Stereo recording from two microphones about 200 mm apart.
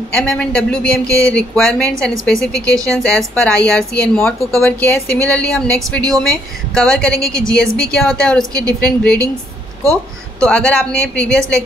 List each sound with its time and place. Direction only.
0.1 s a woman's voice: 5° left (ahead or behind)
1.0 s a sound: 15° right (ahead or behind)
1.3 s a woman's voice: 5° left (ahead or behind)
2.7 s a sound: 15° right (ahead or behind)
3.0 s a woman's voice: 5° left (ahead or behind)
10.4 s a woman's voice: 5° left (ahead or behind)